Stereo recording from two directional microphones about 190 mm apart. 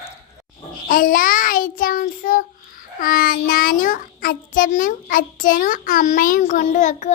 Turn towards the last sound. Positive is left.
turn(degrees=40)  # may be behind; listen again after turning